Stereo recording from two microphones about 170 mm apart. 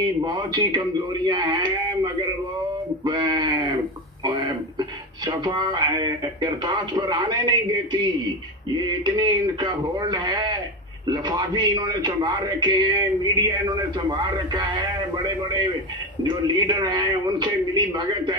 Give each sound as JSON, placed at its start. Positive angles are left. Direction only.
{"t": 0.0, "sound": "a man's voice", "side_deg": -25}
{"t": 3.0, "sound": "sheep", "side_deg": -25}
{"t": 4.2, "sound": "a man's voice", "side_deg": -25}